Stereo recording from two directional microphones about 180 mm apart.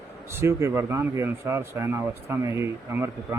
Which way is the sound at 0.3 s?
15° right (ahead or behind).